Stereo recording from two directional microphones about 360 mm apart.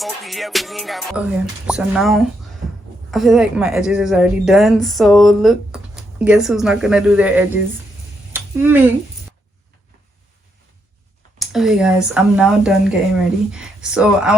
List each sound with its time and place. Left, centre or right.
0.0 s a woman's voice: centre
8.3 s a sound: centre
11.3 s a woman's voice: centre